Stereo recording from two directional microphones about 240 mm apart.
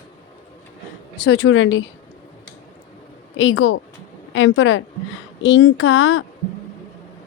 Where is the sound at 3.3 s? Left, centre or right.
Left.